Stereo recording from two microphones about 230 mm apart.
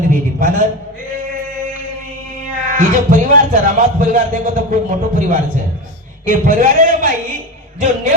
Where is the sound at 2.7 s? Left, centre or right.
Right.